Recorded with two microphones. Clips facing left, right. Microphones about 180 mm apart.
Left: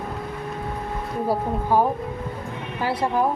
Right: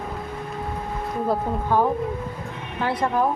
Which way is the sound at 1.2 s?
10° left (ahead or behind).